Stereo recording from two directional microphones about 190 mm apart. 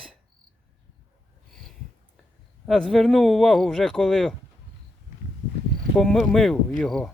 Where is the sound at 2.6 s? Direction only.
Centre (ahead or behind).